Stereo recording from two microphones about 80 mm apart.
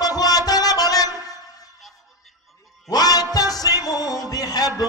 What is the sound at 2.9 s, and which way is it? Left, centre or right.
Music, left.